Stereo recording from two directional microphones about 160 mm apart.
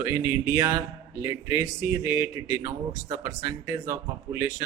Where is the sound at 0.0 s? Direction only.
15° right (ahead or behind).